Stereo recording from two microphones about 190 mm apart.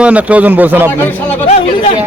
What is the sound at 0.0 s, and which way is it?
Speech, 5° right (ahead or behind).